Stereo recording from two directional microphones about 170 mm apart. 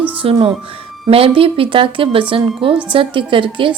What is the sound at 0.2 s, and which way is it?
Speech, 35° right (ahead or behind).